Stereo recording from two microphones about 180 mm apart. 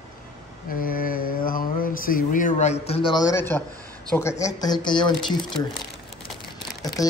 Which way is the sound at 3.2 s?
15° left (ahead or behind).